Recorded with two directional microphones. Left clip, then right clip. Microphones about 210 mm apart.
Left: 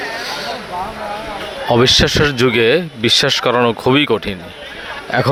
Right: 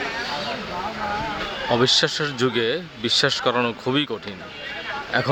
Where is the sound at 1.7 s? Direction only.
35° left (ahead or behind).